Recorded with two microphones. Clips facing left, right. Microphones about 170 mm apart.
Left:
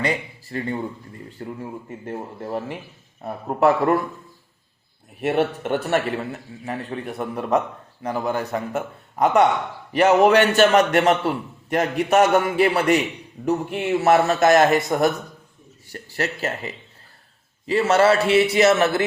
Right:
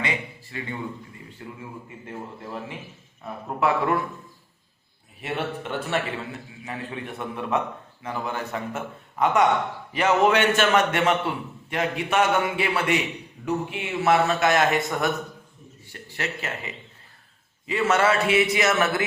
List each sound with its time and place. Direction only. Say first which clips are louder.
0.0 s a man's voice: left 5 dB; 40° left (ahead or behind)
5.2 s a man's voice: left 8 dB; 45° left (ahead or behind); by 19.0 s 30° left (ahead or behind)